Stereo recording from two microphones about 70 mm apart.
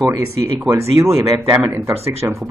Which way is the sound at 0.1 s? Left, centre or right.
Right.